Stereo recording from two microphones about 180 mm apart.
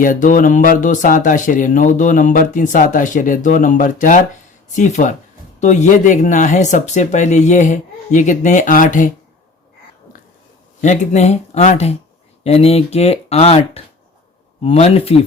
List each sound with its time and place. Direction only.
0.0 s speech: 45° left (ahead or behind)
10.1 s a sound: 50° left (ahead or behind)
10.8 s speech: 40° left (ahead or behind)